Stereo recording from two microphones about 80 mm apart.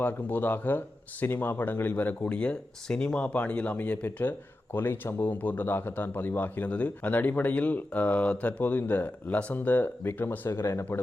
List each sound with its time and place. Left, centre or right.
0.0 s speech: left